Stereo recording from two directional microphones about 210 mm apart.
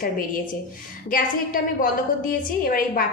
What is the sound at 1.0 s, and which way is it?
A woman's voice, 40° left (ahead or behind).